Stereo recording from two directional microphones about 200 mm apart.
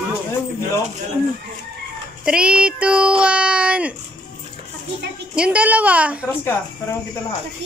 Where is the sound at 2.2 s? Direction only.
5° right (ahead or behind).